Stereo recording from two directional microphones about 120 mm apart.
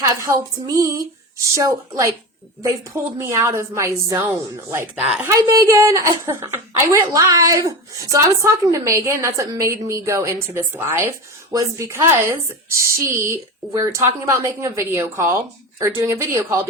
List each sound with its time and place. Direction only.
0.1 s speech: 30° right (ahead or behind)
3.2 s speech: 20° right (ahead or behind)
4.9 s speech: 5° right (ahead or behind)
5.2 s speech: 30° right (ahead or behind)